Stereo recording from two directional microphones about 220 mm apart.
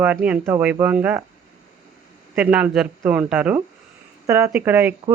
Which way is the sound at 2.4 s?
5° right (ahead or behind).